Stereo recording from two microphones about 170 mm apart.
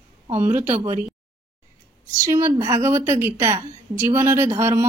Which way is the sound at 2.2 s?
20° right (ahead or behind).